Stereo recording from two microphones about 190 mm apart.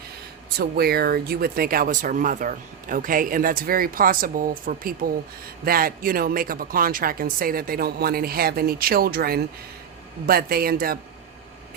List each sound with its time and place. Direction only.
0.6 s speech: 55° right (ahead or behind)